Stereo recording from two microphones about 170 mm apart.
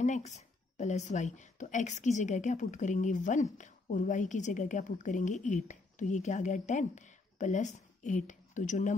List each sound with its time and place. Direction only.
0.0 s a woman's voice: 45° left (ahead or behind)